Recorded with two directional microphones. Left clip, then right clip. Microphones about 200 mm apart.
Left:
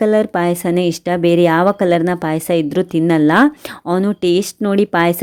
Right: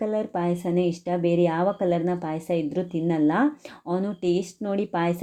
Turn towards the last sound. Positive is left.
turn(degrees=40)  # may be behind; listen again after turning